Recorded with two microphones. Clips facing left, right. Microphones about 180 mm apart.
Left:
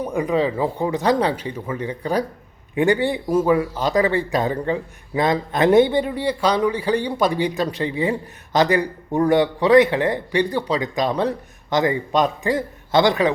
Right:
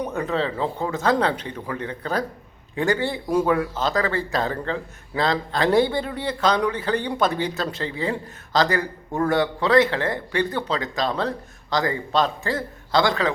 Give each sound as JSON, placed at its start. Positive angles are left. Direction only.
{"t": 0.0, "sound": "speech", "side_deg": 10}